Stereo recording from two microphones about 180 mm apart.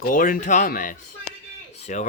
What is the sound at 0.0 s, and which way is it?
Speech, 50° left (ahead or behind).